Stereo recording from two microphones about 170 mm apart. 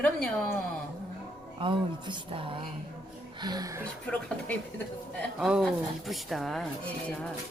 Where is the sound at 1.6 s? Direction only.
30° right (ahead or behind).